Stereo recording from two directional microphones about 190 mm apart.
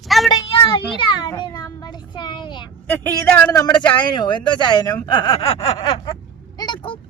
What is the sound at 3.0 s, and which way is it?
Speech, 10° left (ahead or behind).